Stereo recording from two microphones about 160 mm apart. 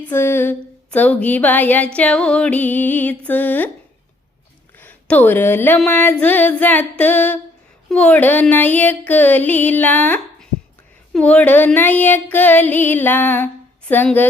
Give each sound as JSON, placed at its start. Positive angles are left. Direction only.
{"t": 0.0, "sound": "music", "side_deg": 15}
{"t": 4.8, "sound": "music", "side_deg": 10}